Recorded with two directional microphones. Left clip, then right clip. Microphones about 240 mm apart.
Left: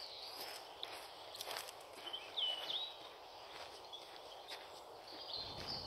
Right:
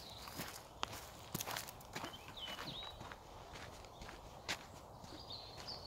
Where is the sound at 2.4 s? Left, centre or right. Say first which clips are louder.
Left 10 dB; right.